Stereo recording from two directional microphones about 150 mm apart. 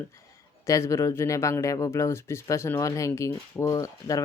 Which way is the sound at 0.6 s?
20° left (ahead or behind).